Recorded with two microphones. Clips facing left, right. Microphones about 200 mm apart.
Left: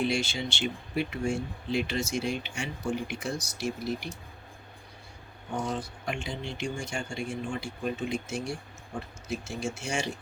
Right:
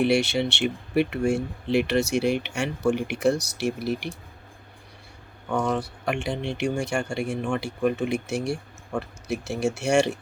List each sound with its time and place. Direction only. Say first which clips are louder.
0.0 s speech: right 8 dB; 65° right (ahead or behind)
5.5 s speech: right 7 dB; 70° right (ahead or behind)